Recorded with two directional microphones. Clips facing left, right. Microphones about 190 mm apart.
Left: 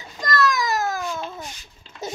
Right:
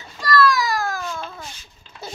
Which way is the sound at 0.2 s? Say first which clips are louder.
Right 3 dB; 20° left (ahead or behind).